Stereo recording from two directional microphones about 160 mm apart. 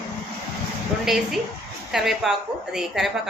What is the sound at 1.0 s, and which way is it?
A woman's voice, centre (ahead or behind).